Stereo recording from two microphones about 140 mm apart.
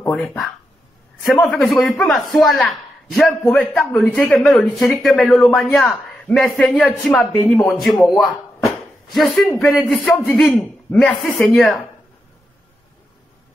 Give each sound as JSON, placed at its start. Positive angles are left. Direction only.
{"t": 0.0, "sound": "a man's voice", "side_deg": 10}
{"t": 8.0, "sound": "speech", "side_deg": 20}
{"t": 9.1, "sound": "a man's voice", "side_deg": 0}
{"t": 11.3, "sound": "a man's voice", "side_deg": 0}